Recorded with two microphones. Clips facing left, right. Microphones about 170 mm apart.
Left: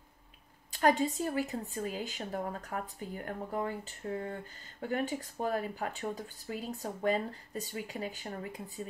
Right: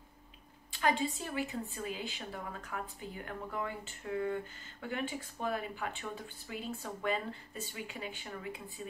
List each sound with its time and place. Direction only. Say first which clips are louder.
0.7 s a woman's voice: left 5 dB; 45° left (ahead or behind)